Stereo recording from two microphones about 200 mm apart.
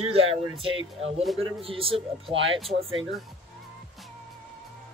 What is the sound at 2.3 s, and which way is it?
Speech, 70° right (ahead or behind).